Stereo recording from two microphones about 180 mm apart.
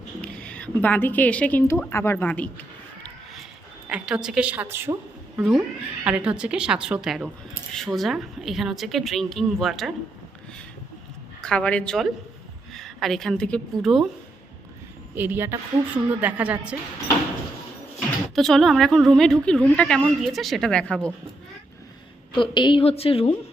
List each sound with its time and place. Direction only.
0.2 s a woman's voice: 5° left (ahead or behind)
3.8 s a woman's voice: 5° right (ahead or behind)
5.4 s a woman's voice: centre (ahead or behind)
11.3 s a woman's voice: 5° left (ahead or behind)
15.1 s a woman's voice: 10° right (ahead or behind)
18.3 s a woman's voice: centre (ahead or behind)
22.4 s a woman's voice: 25° left (ahead or behind)